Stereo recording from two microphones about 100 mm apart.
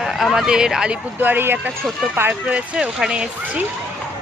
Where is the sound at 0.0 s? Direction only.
Centre (ahead or behind).